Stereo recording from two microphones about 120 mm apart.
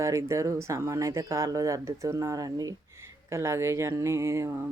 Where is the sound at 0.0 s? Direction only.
25° right (ahead or behind).